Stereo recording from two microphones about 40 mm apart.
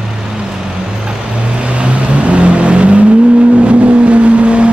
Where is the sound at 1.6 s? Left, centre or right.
Right.